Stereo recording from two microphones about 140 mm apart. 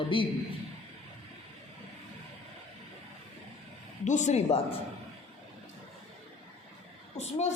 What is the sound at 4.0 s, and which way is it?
Speech, 60° left (ahead or behind).